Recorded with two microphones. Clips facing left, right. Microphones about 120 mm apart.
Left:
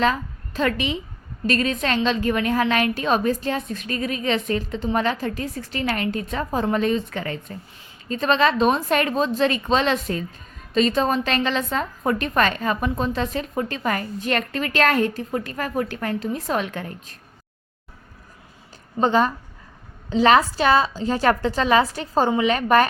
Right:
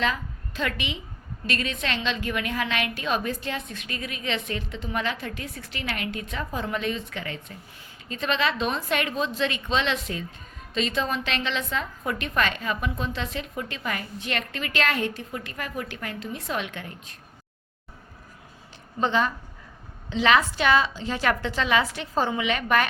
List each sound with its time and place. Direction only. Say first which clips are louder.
0.0 s a woman's voice: left 6 dB; 40° left (ahead or behind)
18.9 s a woman's voice: left 5 dB; 40° left (ahead or behind)